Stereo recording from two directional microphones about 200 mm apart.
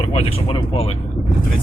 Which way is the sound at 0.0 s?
30° left (ahead or behind).